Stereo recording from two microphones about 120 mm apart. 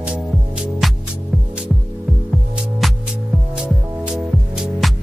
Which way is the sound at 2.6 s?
Centre (ahead or behind).